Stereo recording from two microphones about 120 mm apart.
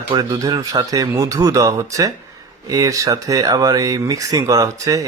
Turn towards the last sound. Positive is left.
turn(degrees=-30)  # may be behind; listen again after turning